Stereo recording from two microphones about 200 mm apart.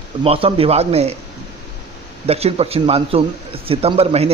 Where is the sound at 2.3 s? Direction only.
30° right (ahead or behind).